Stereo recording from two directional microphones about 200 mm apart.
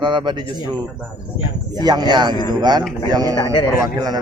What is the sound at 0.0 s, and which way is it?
Speech, 25° right (ahead or behind).